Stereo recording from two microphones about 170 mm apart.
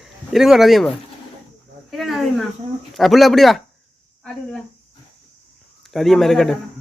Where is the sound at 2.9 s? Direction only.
Centre (ahead or behind).